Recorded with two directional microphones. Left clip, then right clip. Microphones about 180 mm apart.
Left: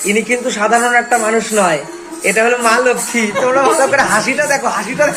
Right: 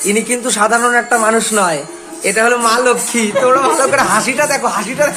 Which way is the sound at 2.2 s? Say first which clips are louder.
Even; 25° right (ahead or behind).